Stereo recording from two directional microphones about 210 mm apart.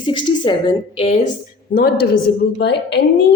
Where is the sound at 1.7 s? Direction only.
40° left (ahead or behind).